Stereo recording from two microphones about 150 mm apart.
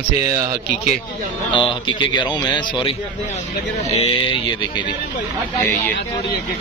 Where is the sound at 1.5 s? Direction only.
35° left (ahead or behind).